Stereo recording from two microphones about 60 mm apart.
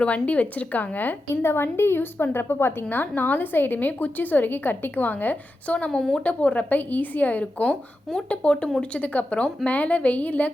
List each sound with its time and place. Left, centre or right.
0.0 s a woman's voice: left
1.3 s a woman's voice: left
6.0 s speech: centre
6.2 s a woman's voice: left